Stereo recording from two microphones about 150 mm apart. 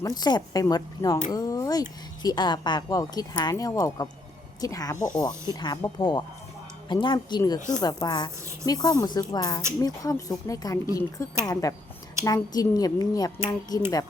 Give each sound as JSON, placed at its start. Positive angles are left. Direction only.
{"t": 0.0, "sound": "speech", "side_deg": 25}